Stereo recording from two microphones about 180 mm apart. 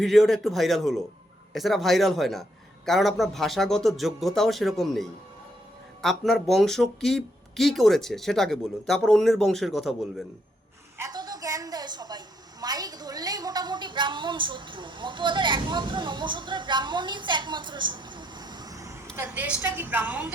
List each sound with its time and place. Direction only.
0.0 s speech: centre (ahead or behind)
10.9 s a woman's voice: 20° right (ahead or behind)